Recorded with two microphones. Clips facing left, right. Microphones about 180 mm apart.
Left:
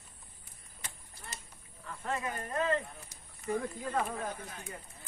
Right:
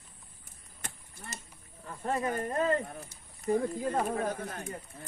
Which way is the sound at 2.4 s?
45° right (ahead or behind).